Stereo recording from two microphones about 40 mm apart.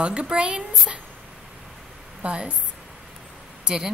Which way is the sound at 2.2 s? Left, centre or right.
Right.